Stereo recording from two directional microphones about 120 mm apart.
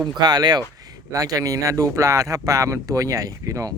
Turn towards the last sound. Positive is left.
turn(degrees=-30)  # may be behind; listen again after turning